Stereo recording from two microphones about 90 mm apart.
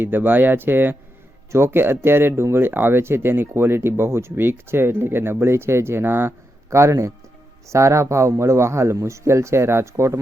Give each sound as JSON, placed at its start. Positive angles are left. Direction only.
{"t": 0.0, "sound": "a man's voice", "side_deg": -20}